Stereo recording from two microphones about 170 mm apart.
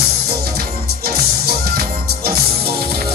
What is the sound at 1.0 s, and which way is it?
Music, 65° right (ahead or behind).